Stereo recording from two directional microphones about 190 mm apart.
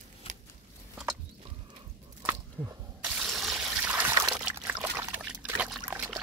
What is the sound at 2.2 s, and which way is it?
Squish, 15° right (ahead or behind).